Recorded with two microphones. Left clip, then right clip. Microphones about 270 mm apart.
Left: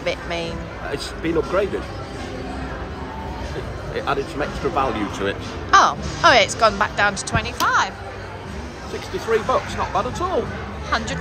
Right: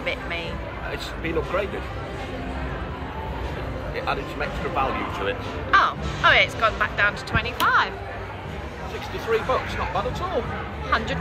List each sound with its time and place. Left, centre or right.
0.0 s speech: centre
0.9 s speech: left
3.9 s speech: left
5.7 s speech: centre
9.3 s speech: left